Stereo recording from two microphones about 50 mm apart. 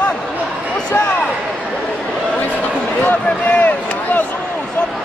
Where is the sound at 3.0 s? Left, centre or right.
Left.